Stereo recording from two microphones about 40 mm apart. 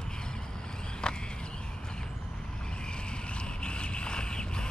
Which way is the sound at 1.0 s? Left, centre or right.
Left.